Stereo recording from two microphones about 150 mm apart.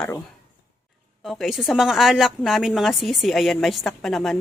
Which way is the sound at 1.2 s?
Centre (ahead or behind).